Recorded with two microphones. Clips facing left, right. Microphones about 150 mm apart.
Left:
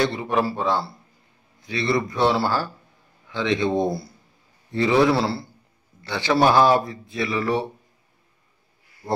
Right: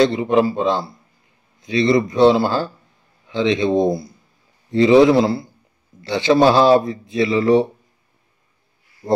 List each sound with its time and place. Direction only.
0.0 s a man's voice: 20° right (ahead or behind)